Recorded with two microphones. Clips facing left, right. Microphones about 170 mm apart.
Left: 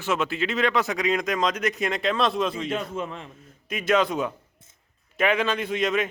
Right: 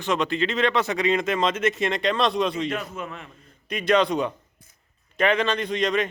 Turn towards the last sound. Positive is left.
turn(degrees=5)  # may be behind; listen again after turning